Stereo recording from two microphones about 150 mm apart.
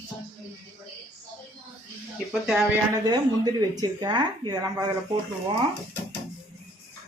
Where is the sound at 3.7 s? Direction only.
25° right (ahead or behind).